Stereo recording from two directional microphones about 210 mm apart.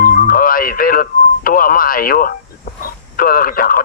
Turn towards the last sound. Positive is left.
turn(degrees=45)  # may be behind; listen again after turning